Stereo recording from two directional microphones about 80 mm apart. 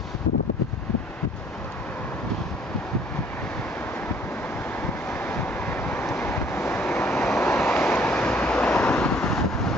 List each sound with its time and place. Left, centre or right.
5.2 s vehicle: left
6.1 s waves: left
7.9 s vehicle: centre